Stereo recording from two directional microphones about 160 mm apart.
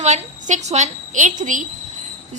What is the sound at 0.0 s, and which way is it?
A woman's voice, 45° right (ahead or behind).